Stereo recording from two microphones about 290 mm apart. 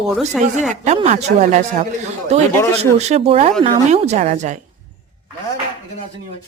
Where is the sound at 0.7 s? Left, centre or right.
Right.